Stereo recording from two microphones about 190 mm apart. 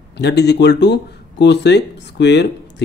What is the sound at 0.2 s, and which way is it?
Speech, 60° left (ahead or behind).